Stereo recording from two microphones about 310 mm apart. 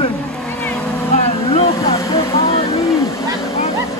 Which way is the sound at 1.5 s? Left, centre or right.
Centre.